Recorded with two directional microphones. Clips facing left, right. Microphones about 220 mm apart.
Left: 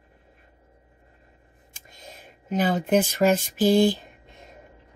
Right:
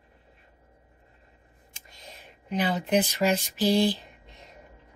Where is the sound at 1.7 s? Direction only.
45° left (ahead or behind).